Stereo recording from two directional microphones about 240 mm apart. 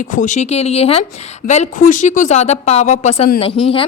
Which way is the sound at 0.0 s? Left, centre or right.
Left.